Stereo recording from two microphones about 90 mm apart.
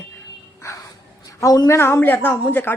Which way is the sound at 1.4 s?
40° left (ahead or behind).